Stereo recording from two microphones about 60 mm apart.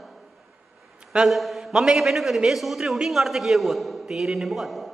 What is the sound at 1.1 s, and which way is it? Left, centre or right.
A man's voice, centre.